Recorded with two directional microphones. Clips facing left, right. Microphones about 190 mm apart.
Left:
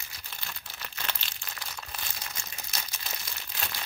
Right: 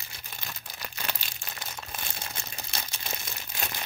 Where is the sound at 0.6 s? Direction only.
15° right (ahead or behind).